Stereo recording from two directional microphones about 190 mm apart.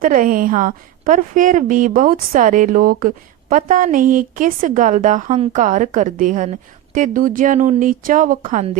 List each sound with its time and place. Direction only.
0.0 s speech: 45° right (ahead or behind)